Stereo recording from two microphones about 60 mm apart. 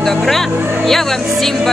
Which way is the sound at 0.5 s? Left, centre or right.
Right.